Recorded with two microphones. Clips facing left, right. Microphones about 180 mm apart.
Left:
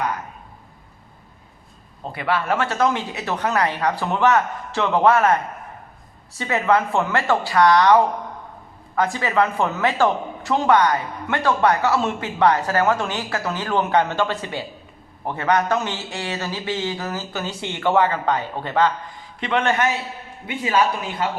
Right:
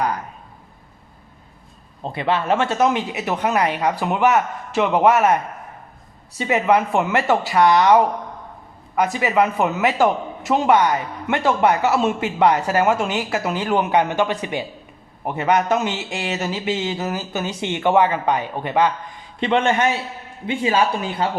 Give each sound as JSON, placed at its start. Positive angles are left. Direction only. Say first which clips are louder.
{"t": 2.1, "sound": "speech", "louder": "right 2 dB", "side_deg": -25}
{"t": 9.1, "sound": "speech", "louder": "right 3 dB", "side_deg": -15}
{"t": 19.4, "sound": "speech", "louder": "right 3 dB", "side_deg": -25}